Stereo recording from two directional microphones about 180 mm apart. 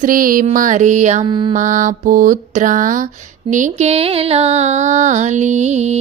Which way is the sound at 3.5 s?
40° right (ahead or behind).